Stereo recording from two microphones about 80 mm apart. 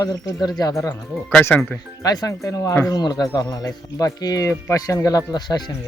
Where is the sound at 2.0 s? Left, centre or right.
Left.